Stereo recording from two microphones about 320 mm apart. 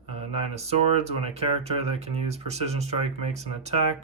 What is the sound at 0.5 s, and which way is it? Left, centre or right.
Speech, centre.